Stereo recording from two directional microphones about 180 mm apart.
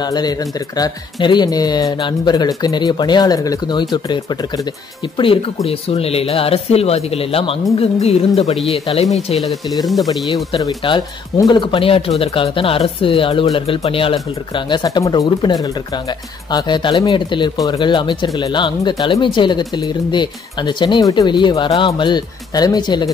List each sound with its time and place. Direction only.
0.0 s speech: 20° left (ahead or behind)
9.4 s speech: centre (ahead or behind)
10.3 s speech: 25° left (ahead or behind)